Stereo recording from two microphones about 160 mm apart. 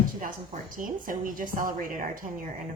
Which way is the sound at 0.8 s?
60° right (ahead or behind).